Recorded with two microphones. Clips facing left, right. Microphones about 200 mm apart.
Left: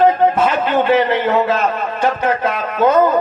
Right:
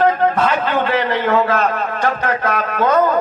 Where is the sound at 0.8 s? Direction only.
15° left (ahead or behind).